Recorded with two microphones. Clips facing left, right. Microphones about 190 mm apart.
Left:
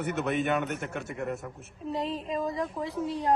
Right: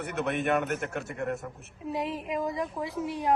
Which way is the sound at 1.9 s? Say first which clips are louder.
Even; 15° right (ahead or behind).